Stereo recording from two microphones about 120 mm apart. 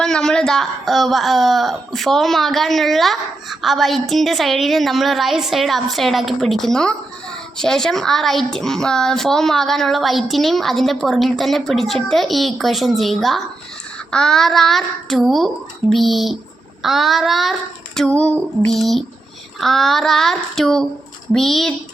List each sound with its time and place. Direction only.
0.0 s speech: 5° left (ahead or behind)